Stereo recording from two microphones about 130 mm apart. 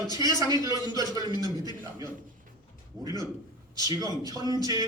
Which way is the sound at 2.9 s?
30° right (ahead or behind).